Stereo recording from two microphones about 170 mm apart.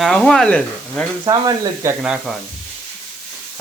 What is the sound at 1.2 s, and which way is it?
Speech, 25° right (ahead or behind).